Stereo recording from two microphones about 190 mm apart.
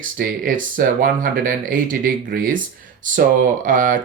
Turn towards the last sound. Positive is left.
turn(degrees=-45)  # may be behind; listen again after turning